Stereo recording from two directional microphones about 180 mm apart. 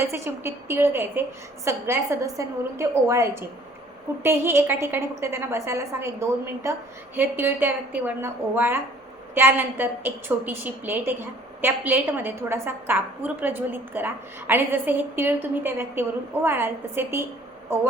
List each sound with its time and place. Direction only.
0.0 s a woman's voice: 15° right (ahead or behind)